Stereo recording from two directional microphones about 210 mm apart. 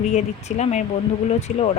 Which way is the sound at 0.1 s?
35° left (ahead or behind).